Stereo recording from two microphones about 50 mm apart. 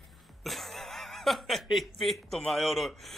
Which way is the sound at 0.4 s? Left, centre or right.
Centre.